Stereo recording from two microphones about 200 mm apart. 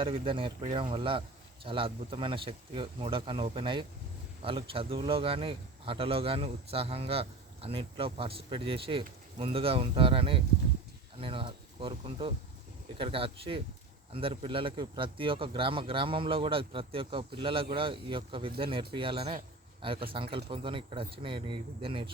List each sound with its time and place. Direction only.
0.0 s speech: 25° right (ahead or behind)